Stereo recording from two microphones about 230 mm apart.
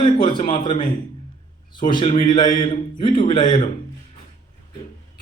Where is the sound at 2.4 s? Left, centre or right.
Left.